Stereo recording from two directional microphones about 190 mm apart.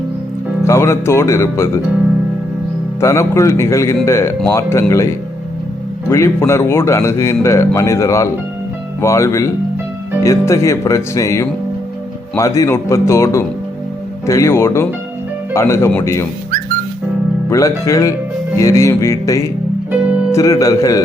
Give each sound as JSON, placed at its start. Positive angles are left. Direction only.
{"t": 0.6, "sound": "speech", "side_deg": 15}
{"t": 3.0, "sound": "speech", "side_deg": 15}
{"t": 17.5, "sound": "speech", "side_deg": 15}